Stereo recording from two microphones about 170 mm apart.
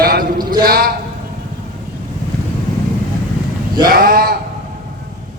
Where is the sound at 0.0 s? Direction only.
60° right (ahead or behind).